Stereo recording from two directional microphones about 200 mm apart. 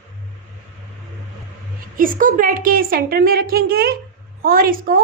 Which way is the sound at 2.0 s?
40° right (ahead or behind).